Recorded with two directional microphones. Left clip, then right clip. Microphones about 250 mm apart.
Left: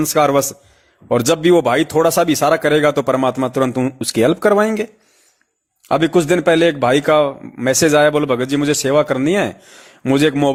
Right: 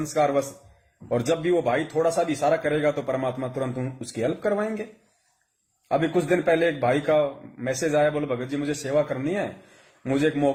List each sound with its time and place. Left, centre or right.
0.1 s speech: left
5.9 s speech: left